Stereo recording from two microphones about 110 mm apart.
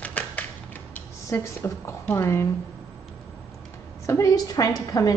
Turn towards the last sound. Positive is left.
turn(degrees=35)  # may be behind; listen again after turning